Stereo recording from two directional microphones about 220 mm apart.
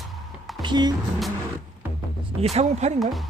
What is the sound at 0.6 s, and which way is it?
Speech, 20° right (ahead or behind).